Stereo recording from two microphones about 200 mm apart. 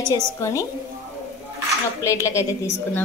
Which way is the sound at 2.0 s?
15° left (ahead or behind).